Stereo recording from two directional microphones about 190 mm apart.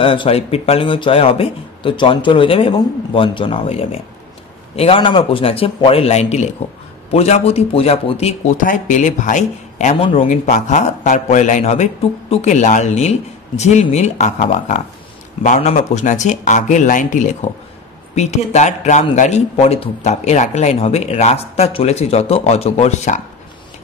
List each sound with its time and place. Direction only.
0.0 s a man's voice: 25° left (ahead or behind)
10.2 s a man's voice: 40° left (ahead or behind)